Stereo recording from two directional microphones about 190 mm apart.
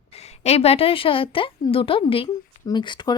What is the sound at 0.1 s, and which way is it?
A woman's voice, 35° left (ahead or behind).